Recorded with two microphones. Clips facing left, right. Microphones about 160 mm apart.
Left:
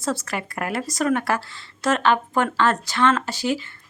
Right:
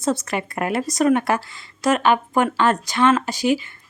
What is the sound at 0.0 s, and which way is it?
Speech, 20° right (ahead or behind).